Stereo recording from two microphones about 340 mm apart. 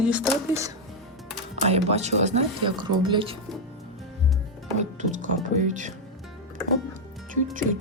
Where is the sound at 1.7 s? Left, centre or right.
Centre.